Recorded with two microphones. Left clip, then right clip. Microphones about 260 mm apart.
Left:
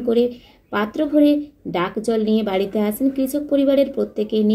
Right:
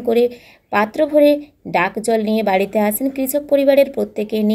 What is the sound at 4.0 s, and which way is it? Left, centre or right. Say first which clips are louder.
Speech: right 1 dB; right.